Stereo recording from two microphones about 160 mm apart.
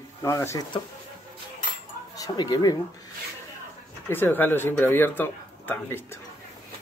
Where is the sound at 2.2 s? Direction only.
25° left (ahead or behind).